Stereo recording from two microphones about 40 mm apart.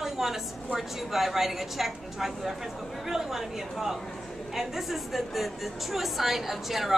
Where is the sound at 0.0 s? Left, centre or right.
Centre.